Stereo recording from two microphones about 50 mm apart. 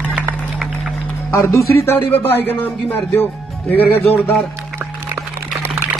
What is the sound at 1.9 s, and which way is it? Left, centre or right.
Speech, left.